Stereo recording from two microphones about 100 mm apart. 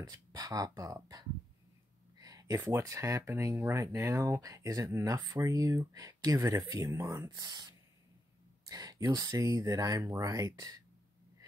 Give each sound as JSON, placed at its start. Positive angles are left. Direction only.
{"t": 0.0, "sound": "speech", "side_deg": -40}
{"t": 2.1, "sound": "a sound", "side_deg": -35}
{"t": 2.8, "sound": "speech", "side_deg": -30}
{"t": 7.2, "sound": "speech", "side_deg": -45}
{"t": 8.6, "sound": "speech", "side_deg": -35}